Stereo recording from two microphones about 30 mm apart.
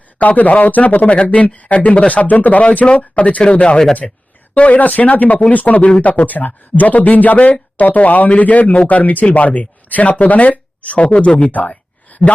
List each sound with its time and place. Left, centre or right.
0.2 s speech: left
1.1 s speech: left
3.4 s speech: left
4.5 s speech: left